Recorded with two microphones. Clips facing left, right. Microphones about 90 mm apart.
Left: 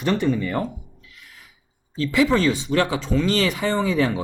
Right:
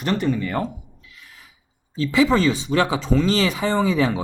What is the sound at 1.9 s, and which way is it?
Speech, 25° right (ahead or behind).